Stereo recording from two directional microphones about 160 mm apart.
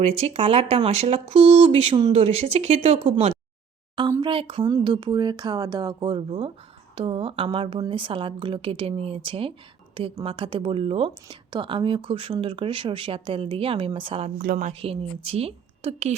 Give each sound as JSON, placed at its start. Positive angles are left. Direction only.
{"t": 0.0, "sound": "speech", "side_deg": -40}
{"t": 14.3, "sound": "a woman's voice", "side_deg": -60}
{"t": 14.7, "sound": "speech", "side_deg": -40}